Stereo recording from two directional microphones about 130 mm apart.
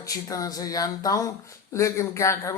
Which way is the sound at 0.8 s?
25° left (ahead or behind).